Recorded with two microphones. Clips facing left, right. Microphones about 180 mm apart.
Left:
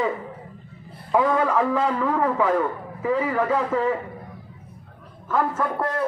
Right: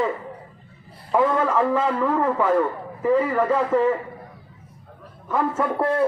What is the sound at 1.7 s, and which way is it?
Speech, 10° right (ahead or behind).